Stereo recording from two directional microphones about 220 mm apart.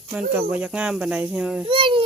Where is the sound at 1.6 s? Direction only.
25° right (ahead or behind).